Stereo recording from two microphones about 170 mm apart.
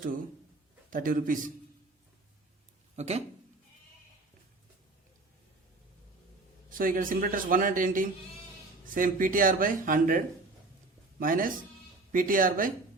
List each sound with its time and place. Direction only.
0.9 s speech: 55° right (ahead or behind)
2.9 s speech: 40° right (ahead or behind)
6.7 s speech: 55° right (ahead or behind)